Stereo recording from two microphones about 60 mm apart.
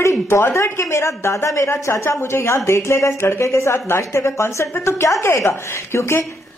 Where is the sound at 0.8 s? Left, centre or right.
Left.